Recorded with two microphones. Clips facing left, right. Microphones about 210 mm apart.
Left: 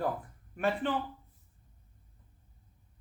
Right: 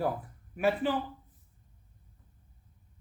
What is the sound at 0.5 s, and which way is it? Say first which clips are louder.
Speech: right 3 dB; 5° right (ahead or behind).